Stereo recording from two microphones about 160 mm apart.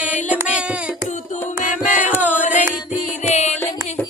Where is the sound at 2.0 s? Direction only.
10° right (ahead or behind).